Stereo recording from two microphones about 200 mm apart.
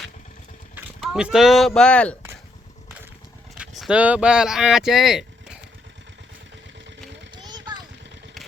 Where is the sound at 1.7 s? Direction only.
5° left (ahead or behind).